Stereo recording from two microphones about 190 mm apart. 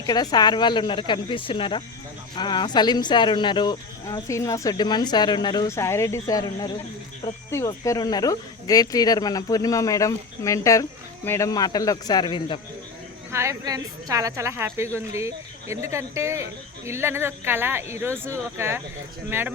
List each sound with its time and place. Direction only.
0.0 s speech: 20° left (ahead or behind)
13.3 s a woman's voice: 15° right (ahead or behind)